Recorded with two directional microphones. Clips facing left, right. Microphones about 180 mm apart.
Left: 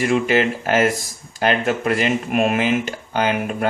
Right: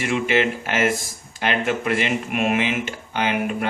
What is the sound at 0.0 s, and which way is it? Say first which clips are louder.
Speech: left 3 dB; 40° left (ahead or behind).